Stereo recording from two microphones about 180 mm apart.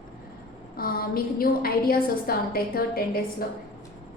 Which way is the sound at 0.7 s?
55° left (ahead or behind).